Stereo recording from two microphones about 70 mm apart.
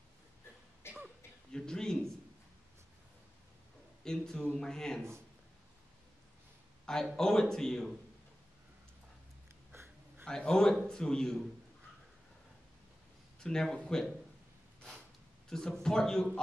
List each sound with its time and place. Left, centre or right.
0.8 s throat clearing: left
1.5 s a sound: centre
4.0 s a man's voice: centre
7.2 s a man's voice: centre
9.7 s a sound: right
10.2 s a man's voice: centre
13.4 s a man's voice: centre
15.5 s a man's voice: centre